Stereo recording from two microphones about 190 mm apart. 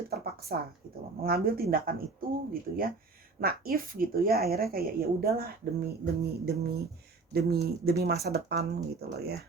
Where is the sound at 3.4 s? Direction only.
50° right (ahead or behind).